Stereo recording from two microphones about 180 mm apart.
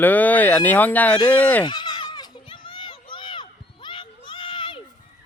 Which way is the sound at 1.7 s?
25° left (ahead or behind).